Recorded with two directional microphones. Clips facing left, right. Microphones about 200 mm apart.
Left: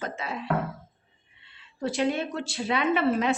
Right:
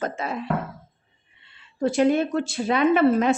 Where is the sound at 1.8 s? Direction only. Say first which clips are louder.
Right 7 dB; 50° right (ahead or behind).